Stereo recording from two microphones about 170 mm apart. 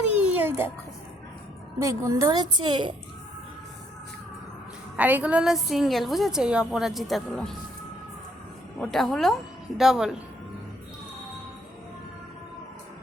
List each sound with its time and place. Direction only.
0.2 s music: 10° right (ahead or behind)
1.8 s a woman's voice: 20° right (ahead or behind)
4.9 s a woman's voice: 10° right (ahead or behind)
8.8 s a woman's voice: centre (ahead or behind)